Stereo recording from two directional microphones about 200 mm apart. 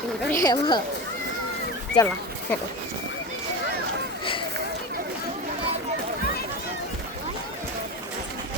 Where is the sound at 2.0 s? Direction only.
25° left (ahead or behind).